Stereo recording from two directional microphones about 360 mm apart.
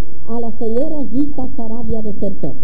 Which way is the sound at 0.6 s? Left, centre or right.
Centre.